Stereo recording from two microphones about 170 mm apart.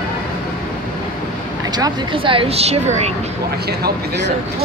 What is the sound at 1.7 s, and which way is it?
Speech, 25° right (ahead or behind).